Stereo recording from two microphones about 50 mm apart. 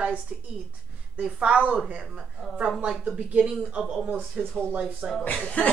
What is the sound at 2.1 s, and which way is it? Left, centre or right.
Speech, centre.